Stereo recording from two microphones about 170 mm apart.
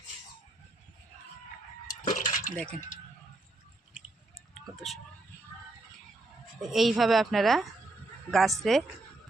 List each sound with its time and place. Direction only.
2.0 s water: 50° left (ahead or behind)
2.6 s a woman's voice: 5° left (ahead or behind)
6.6 s a woman's voice: centre (ahead or behind)